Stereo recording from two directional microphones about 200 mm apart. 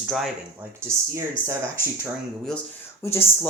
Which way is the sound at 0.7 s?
15° right (ahead or behind).